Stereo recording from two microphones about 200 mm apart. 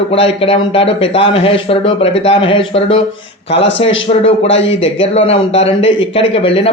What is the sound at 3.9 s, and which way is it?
Speech, 70° left (ahead or behind).